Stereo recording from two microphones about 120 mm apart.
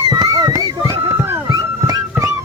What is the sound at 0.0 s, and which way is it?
Music, 35° right (ahead or behind).